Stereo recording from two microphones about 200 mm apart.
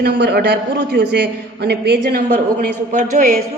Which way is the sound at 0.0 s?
55° right (ahead or behind).